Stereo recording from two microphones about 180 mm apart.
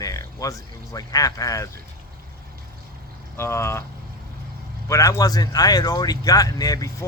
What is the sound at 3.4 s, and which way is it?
Speech, 15° left (ahead or behind).